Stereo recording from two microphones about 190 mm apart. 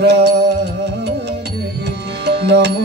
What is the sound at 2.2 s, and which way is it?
Music, 60° right (ahead or behind).